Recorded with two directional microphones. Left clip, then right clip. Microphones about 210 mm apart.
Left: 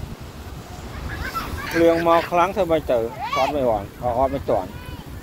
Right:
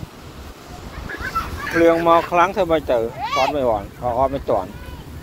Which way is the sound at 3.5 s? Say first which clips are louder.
Right 1 dB; centre (ahead or behind).